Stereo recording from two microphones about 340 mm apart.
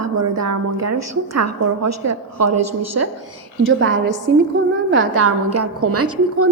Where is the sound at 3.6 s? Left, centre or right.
Right.